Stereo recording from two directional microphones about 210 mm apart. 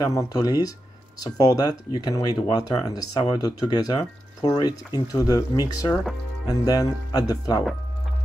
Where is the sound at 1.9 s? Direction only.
20° left (ahead or behind).